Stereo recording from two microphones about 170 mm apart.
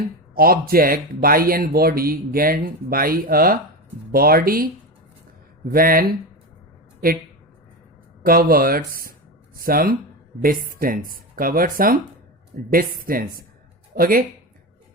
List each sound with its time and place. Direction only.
0.3 s speech: 60° right (ahead or behind)
8.2 s speech: 60° right (ahead or behind)